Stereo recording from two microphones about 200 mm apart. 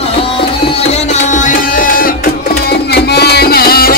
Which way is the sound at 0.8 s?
40° left (ahead or behind).